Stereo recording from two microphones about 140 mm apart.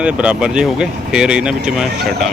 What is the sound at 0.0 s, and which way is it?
Speech, 10° right (ahead or behind).